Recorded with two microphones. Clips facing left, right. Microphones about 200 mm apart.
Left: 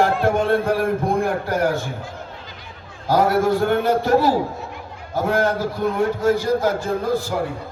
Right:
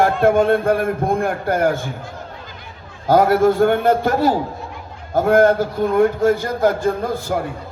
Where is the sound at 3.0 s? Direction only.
50° right (ahead or behind).